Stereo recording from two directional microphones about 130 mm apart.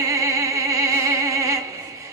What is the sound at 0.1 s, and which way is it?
Music, 25° right (ahead or behind).